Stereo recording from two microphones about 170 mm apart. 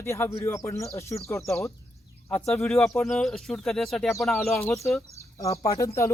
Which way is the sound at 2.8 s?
Centre (ahead or behind).